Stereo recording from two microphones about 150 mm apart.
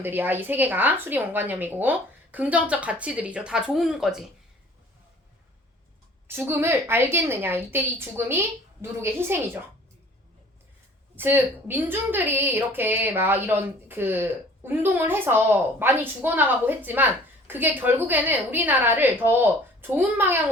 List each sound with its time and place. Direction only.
0.0 s a woman's voice: 15° right (ahead or behind)
6.2 s a woman's voice: 15° right (ahead or behind)
11.1 s a woman's voice: 15° right (ahead or behind)